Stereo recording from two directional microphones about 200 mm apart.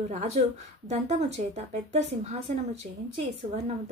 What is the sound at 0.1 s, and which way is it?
A woman's voice, 35° right (ahead or behind).